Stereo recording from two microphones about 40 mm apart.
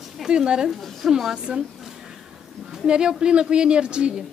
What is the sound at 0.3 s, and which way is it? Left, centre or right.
Speech, centre.